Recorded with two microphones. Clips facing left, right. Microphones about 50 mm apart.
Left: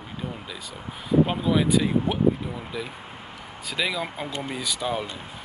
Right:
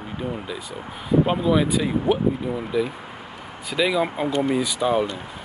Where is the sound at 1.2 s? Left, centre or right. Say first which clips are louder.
Right 2 dB; centre.